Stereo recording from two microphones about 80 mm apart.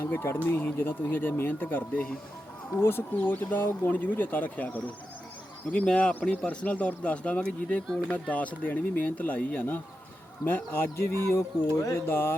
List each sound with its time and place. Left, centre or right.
0.0 s speech: left